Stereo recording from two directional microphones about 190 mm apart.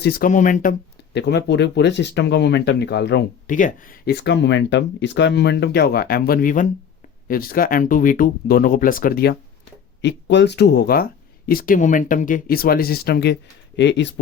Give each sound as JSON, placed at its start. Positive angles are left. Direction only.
{"t": 0.0, "sound": "speech", "side_deg": 50}
{"t": 1.1, "sound": "speech", "side_deg": 60}
{"t": 3.4, "sound": "speech", "side_deg": 45}
{"t": 10.0, "sound": "speech", "side_deg": 65}